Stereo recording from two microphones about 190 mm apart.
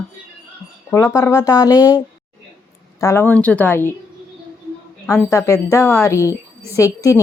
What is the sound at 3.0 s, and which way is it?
Speech, 15° left (ahead or behind).